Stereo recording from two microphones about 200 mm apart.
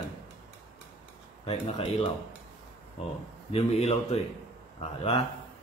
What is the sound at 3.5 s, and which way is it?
A man's voice, 30° left (ahead or behind).